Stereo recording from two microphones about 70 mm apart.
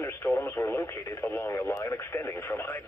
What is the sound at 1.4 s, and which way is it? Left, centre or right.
Speech, left.